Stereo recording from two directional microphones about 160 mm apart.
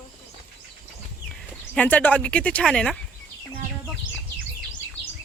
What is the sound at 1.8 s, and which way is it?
Speech, 10° left (ahead or behind).